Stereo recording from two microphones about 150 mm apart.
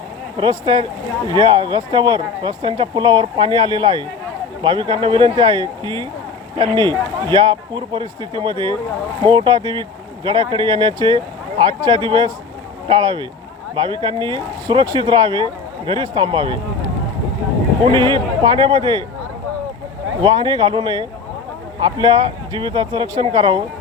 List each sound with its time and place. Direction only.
0.3 s speech: 30° right (ahead or behind)
17.8 s speech: 30° right (ahead or behind)
20.2 s speech: 30° right (ahead or behind)